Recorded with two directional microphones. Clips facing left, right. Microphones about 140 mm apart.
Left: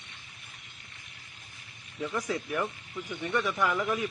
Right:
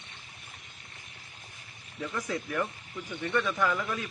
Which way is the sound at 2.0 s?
15° left (ahead or behind).